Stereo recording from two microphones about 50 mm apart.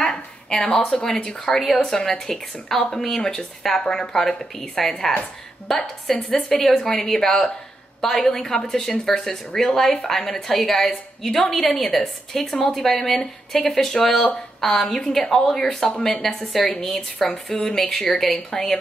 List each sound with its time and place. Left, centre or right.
0.0 s a woman's voice: centre